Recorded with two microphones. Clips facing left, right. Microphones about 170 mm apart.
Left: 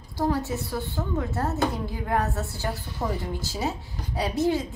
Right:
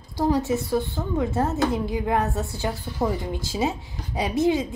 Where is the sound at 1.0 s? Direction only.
20° right (ahead or behind).